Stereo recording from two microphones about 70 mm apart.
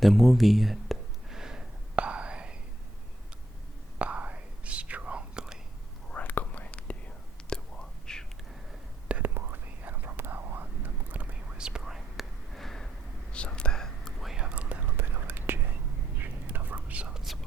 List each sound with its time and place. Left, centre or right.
0.0 s a sound: centre
3.9 s whispering: centre
6.1 s whispering: left
9.2 s whispering: right; by 14.4 s centre
14.4 s whispering: centre